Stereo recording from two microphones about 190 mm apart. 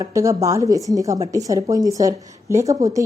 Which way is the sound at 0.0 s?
15° right (ahead or behind).